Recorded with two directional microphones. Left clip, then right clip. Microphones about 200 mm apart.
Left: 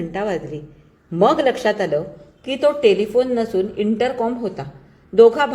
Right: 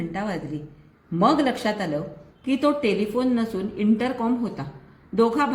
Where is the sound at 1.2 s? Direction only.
30° left (ahead or behind).